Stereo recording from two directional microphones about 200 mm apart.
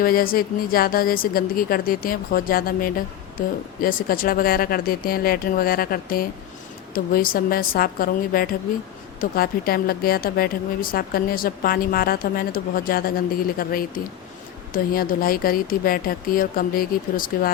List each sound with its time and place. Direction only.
0.0 s speech: 45° left (ahead or behind)